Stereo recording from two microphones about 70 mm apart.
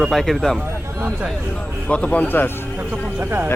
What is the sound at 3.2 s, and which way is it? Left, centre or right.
Speech, right.